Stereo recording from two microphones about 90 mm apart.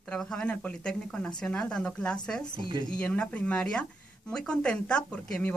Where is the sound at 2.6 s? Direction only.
65° right (ahead or behind).